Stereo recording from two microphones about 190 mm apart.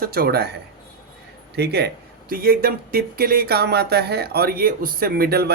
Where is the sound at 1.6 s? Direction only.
60° right (ahead or behind).